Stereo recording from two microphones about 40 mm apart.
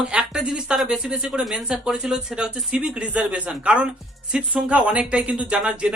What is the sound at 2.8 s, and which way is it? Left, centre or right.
Speech, right.